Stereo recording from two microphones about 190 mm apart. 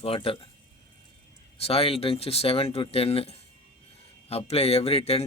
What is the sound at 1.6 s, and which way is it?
Speech, 30° left (ahead or behind).